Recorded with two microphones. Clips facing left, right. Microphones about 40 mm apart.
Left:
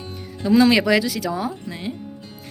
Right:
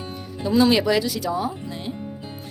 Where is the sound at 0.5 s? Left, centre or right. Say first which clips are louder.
Left 3 dB; left.